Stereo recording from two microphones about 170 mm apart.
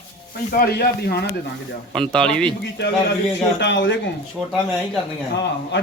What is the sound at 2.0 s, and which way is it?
Speech, 5° left (ahead or behind).